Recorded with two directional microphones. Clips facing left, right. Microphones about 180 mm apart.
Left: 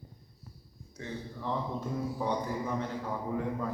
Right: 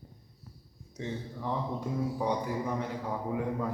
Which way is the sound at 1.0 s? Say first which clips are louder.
Right 3 dB; 15° right (ahead or behind).